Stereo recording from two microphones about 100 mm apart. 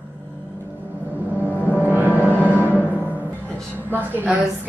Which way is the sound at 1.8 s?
20° right (ahead or behind).